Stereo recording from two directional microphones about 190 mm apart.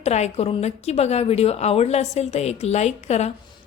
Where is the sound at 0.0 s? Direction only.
35° left (ahead or behind).